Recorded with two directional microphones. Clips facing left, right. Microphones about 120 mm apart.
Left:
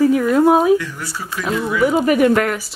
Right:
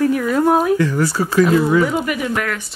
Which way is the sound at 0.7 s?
90° right.